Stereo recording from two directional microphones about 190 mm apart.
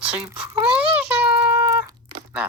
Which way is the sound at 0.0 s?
5° right (ahead or behind).